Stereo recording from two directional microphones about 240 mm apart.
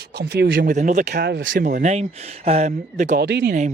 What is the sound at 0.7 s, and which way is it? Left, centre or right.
Speech, right.